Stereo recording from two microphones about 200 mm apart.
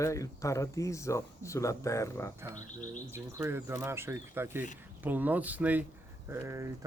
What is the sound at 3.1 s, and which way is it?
Speech, 10° right (ahead or behind).